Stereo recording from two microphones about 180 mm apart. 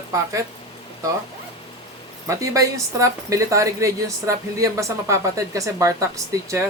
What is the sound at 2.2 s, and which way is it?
A woman's voice, 15° right (ahead or behind).